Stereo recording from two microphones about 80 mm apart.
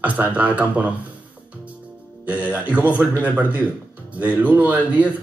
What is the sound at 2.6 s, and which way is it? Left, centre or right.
A man's voice, centre.